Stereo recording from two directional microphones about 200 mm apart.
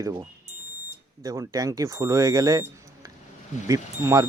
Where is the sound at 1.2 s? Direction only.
15° right (ahead or behind).